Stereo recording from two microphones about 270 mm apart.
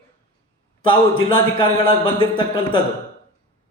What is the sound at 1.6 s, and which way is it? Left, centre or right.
Speech, centre.